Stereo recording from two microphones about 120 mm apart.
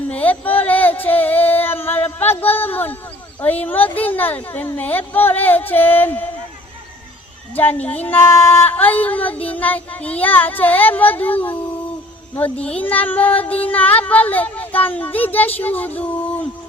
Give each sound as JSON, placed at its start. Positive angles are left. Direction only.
{"t": 0.1, "sound": "a sound", "side_deg": 15}
{"t": 3.4, "sound": "speech", "side_deg": 15}
{"t": 7.5, "sound": "a woman's voice", "side_deg": 15}